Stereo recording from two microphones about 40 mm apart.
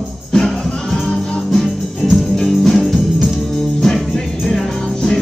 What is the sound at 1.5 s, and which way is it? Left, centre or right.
Music, centre.